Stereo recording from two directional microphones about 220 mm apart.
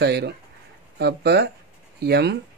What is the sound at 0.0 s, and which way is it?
Speech, 50° right (ahead or behind).